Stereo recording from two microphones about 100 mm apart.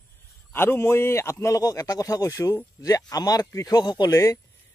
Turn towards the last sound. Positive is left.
turn(degrees=30)  # may be behind; listen again after turning